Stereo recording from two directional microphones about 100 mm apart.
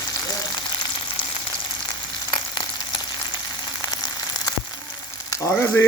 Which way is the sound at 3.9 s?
40° left (ahead or behind).